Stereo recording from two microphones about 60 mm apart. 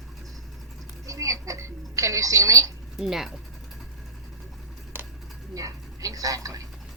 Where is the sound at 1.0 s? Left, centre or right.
Right.